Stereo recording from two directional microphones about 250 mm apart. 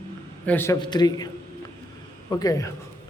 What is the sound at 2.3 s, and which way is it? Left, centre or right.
Speech, centre.